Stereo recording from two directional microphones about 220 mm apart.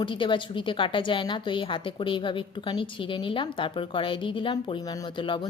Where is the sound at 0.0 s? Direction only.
20° left (ahead or behind).